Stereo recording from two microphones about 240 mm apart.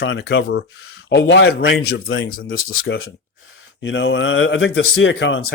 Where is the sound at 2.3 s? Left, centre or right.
Left.